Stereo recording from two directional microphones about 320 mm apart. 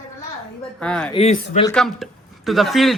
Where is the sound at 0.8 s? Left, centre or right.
Centre.